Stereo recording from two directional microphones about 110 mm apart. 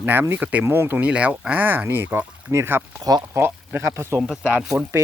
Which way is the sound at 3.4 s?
20° right (ahead or behind).